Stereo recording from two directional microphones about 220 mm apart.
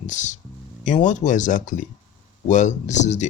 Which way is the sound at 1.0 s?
35° left (ahead or behind).